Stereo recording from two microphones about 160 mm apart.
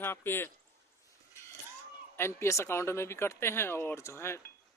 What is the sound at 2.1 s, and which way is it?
A man's voice, 15° left (ahead or behind).